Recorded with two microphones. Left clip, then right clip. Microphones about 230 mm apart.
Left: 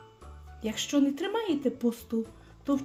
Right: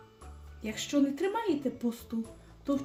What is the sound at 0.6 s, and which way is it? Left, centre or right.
Speech, left.